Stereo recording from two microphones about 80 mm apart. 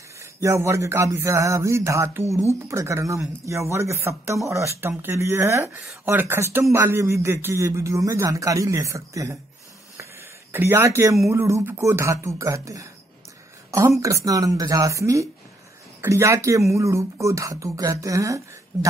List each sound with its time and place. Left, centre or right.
0.2 s a man's voice: right
10.5 s a man's voice: right